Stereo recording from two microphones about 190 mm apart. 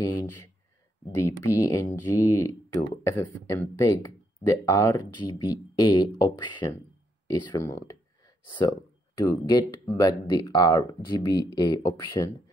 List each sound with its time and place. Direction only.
0.0 s speech: 20° left (ahead or behind)